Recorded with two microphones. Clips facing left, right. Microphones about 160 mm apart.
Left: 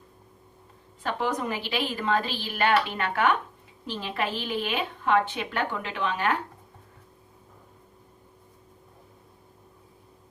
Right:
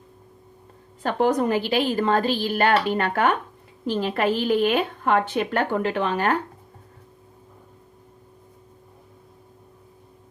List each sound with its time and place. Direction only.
1.0 s a woman's voice: 45° right (ahead or behind)